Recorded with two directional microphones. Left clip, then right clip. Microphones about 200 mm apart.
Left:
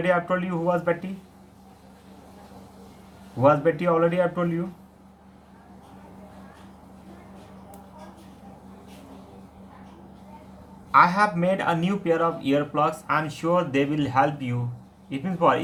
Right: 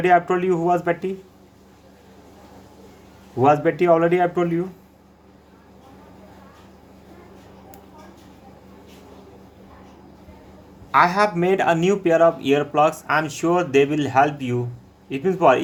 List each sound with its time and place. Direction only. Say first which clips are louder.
0.0 s speech: right 6 dB; 45° right (ahead or behind)
3.4 s speech: right 3 dB; 45° right (ahead or behind)
10.9 s a man's voice: right 2 dB; 45° right (ahead or behind)